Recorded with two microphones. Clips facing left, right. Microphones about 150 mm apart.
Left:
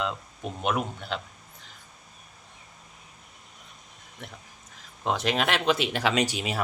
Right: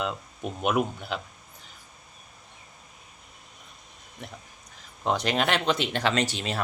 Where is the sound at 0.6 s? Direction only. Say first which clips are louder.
Right 3 dB; 5° right (ahead or behind).